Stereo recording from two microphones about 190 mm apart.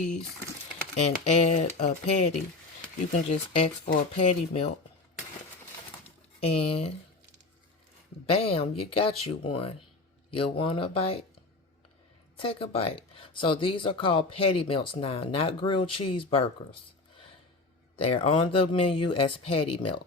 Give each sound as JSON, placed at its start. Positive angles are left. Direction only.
{"t": 0.9, "sound": "speech", "side_deg": 35}
{"t": 6.4, "sound": "speech", "side_deg": 30}
{"t": 8.3, "sound": "speech", "side_deg": 30}
{"t": 12.4, "sound": "speech", "side_deg": 30}
{"t": 18.0, "sound": "speech", "side_deg": 30}